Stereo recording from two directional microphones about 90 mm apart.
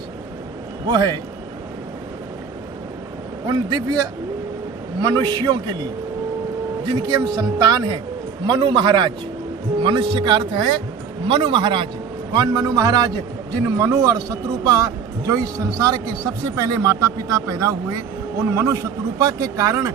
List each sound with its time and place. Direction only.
0.9 s a man's voice: 50° right (ahead or behind)
3.4 s a man's voice: 55° right (ahead or behind)
6.8 s a man's voice: 50° right (ahead or behind)
12.3 s a man's voice: 50° right (ahead or behind)